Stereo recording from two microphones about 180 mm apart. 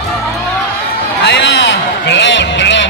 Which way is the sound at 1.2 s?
85° left.